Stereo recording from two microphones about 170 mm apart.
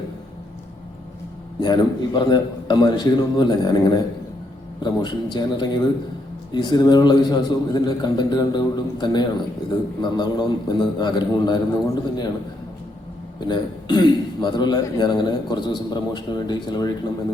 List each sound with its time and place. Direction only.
1.6 s a man's voice: 25° left (ahead or behind)
13.5 s a man's voice: 25° left (ahead or behind)